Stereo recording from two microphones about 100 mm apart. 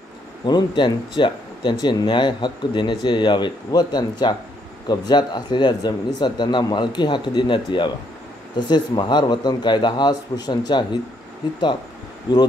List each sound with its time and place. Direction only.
0.5 s speech: 45° left (ahead or behind)
12.3 s speech: 45° left (ahead or behind)